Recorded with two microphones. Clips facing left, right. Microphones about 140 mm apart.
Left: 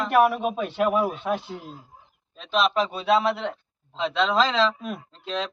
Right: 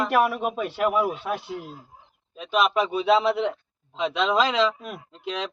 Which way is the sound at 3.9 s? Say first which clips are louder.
Even; 10° right (ahead or behind).